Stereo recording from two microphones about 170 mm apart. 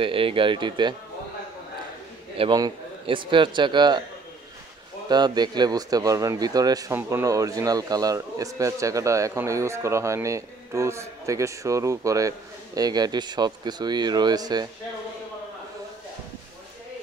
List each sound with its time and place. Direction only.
0.0 s speech: 30° right (ahead or behind)
2.3 s speech: 30° right (ahead or behind)
5.0 s speech: 25° right (ahead or behind)